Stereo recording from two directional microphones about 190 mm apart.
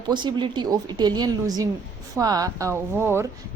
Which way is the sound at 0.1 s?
25° right (ahead or behind).